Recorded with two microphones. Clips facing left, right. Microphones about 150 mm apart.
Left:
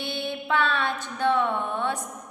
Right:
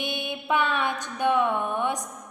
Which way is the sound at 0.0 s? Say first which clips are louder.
Left 1 dB; 15° right (ahead or behind).